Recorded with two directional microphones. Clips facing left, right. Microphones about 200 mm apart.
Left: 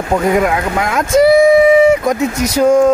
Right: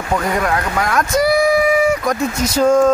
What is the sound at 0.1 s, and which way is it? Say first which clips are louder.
Speech: left 5 dB; 20° left (ahead or behind).